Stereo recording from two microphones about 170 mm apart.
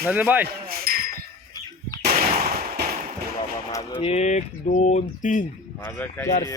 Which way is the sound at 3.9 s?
35° left (ahead or behind).